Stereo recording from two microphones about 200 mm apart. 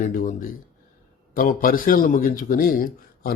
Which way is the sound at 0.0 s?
40° left (ahead or behind).